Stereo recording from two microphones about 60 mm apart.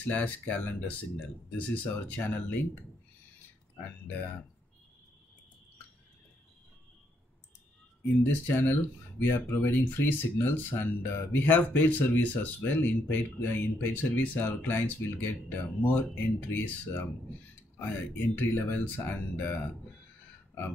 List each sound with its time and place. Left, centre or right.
0.0 s speech: left
8.2 s speech: left